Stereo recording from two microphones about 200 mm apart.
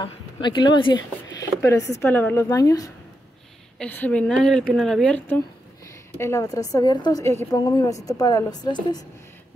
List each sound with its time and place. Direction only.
0.0 s a woman's voice: 20° left (ahead or behind)
3.7 s a woman's voice: 5° left (ahead or behind)